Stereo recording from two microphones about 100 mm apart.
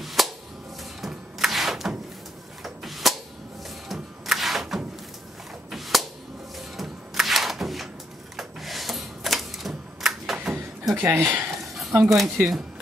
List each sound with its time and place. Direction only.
0.0 s a sound: centre (ahead or behind)
5.7 s whip: centre (ahead or behind)
6.8 s a sound: centre (ahead or behind)
8.4 s typewriter: centre (ahead or behind)
11.0 s speech: 20° right (ahead or behind)
11.6 s speech: centre (ahead or behind)